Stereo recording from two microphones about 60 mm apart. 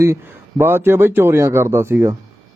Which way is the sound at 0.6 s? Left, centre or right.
Right.